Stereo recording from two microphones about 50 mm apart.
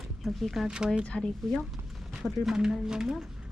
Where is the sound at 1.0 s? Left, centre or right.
Centre.